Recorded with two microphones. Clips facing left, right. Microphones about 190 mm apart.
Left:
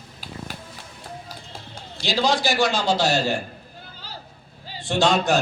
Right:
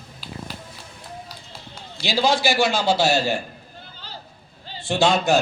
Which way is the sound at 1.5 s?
50° left (ahead or behind).